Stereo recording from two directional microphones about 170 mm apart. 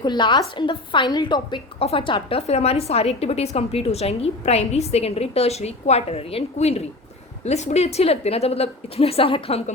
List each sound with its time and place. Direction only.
0.0 s a woman's voice: 25° left (ahead or behind)